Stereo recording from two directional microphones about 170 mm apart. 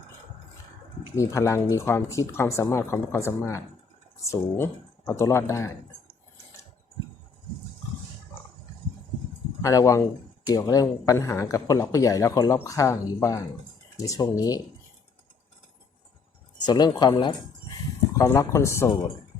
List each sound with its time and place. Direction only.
1.1 s speech: 15° left (ahead or behind)
9.6 s speech: 20° left (ahead or behind)
16.6 s speech: 25° left (ahead or behind)
18.2 s speech: 15° left (ahead or behind)